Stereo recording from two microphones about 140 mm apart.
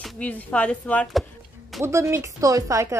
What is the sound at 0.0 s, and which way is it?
Speech, 10° left (ahead or behind).